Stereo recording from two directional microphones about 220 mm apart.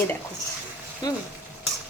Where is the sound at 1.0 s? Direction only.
15° left (ahead or behind).